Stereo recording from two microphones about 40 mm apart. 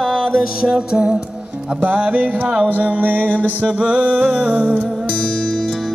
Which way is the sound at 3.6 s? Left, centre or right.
Right.